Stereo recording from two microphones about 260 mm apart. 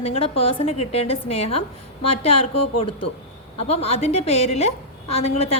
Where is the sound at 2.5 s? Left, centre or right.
Left.